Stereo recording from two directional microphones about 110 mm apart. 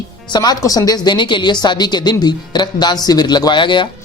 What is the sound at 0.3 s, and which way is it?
Speech, 40° left (ahead or behind).